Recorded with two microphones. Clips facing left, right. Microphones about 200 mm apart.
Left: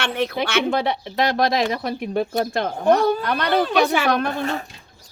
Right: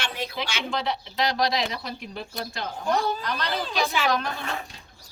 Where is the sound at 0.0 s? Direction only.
60° left (ahead or behind).